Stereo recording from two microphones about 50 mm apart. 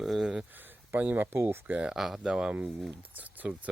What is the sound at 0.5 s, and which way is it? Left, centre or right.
Speech, right.